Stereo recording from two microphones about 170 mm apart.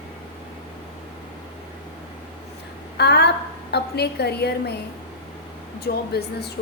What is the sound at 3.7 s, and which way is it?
A woman's voice, 75° left (ahead or behind).